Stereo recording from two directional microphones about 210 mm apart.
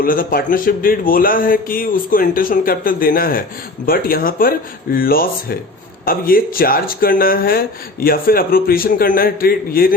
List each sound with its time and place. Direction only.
0.0 s speech: 40° left (ahead or behind)